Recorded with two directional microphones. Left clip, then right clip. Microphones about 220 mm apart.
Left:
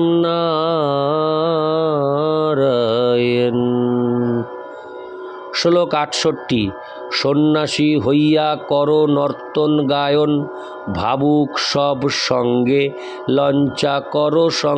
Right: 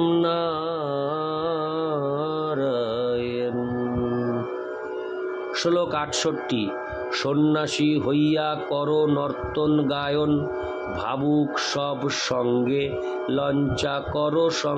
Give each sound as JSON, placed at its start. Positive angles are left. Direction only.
{"t": 0.0, "sound": "music", "side_deg": 30}
{"t": 5.6, "sound": "speech", "side_deg": 35}